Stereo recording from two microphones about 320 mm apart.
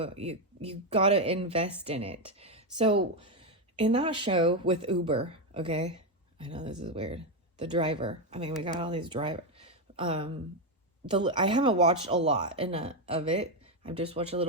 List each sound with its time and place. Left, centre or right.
0.0 s speech: centre